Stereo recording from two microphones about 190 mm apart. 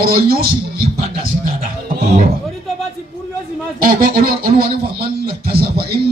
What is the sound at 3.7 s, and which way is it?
Speech, 50° right (ahead or behind).